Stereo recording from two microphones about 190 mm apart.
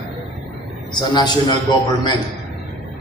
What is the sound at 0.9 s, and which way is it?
Speech, 20° left (ahead or behind).